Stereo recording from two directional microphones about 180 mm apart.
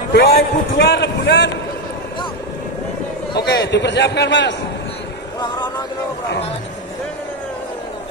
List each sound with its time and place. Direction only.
0.1 s a man's voice: 70° left (ahead or behind)
3.3 s a man's voice: 65° left (ahead or behind); by 4.6 s 80° left
5.4 s music: 25° left (ahead or behind)